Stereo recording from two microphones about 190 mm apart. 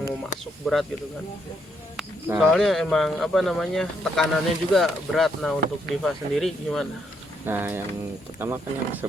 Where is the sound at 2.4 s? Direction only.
Centre (ahead or behind).